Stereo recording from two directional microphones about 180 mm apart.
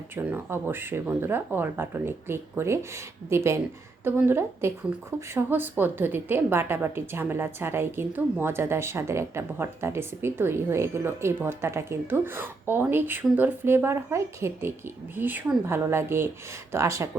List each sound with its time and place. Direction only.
0.2 s a woman's voice: 10° right (ahead or behind)